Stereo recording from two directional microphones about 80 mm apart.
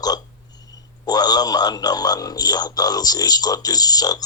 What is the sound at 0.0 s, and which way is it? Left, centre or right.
A man's voice, left.